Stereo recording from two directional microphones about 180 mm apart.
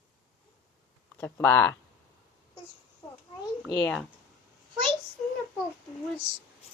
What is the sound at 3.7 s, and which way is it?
Speech, 5° left (ahead or behind).